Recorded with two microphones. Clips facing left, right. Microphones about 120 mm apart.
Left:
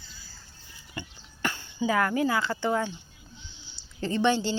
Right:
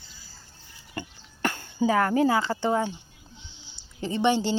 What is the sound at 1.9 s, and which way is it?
Speech, 35° right (ahead or behind).